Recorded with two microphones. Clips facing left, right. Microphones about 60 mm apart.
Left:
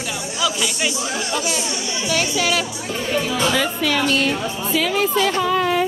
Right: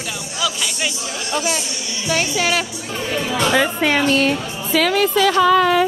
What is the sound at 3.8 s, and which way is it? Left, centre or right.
Speech, right.